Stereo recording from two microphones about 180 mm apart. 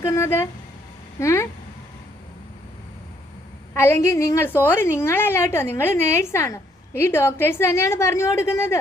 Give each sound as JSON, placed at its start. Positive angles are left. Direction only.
{"t": 0.0, "sound": "a sound", "side_deg": 15}
{"t": 1.2, "sound": "a woman's voice", "side_deg": 15}
{"t": 3.8, "sound": "a woman's voice", "side_deg": 15}